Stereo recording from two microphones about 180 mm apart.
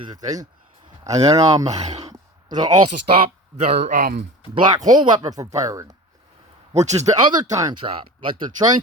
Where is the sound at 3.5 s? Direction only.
40° right (ahead or behind).